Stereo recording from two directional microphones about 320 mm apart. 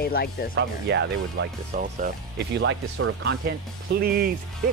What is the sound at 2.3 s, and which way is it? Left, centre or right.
Speech, right.